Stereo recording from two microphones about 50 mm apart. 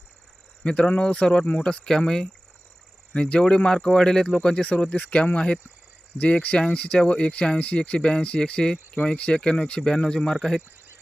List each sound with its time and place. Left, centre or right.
0.6 s speech: left
10.1 s speech: centre